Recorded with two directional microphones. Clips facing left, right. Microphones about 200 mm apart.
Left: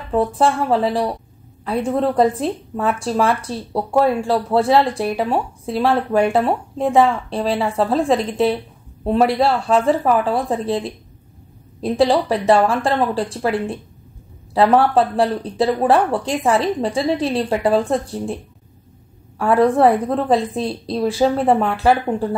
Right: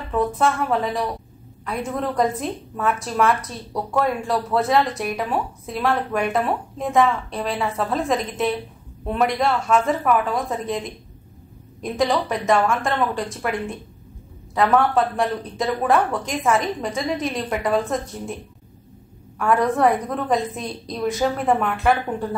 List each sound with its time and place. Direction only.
0.1 s a woman's voice: 30° left (ahead or behind)